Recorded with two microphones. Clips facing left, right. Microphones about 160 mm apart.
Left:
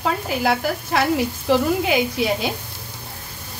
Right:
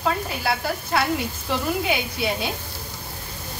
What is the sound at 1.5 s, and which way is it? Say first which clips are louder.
A woman's voice: left 6 dB; 90° left.